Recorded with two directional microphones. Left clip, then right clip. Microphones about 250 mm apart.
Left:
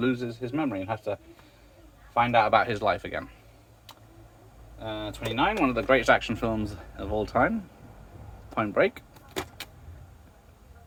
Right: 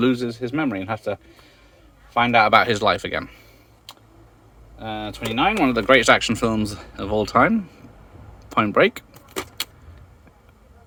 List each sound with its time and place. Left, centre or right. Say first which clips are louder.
0.0 s speech: right 7 dB; right
4.8 s speech: right 5 dB; right